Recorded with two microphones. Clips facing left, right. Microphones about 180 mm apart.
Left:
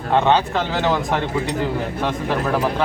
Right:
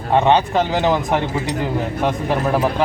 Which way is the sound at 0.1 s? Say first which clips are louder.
Right 2 dB; 15° right (ahead or behind).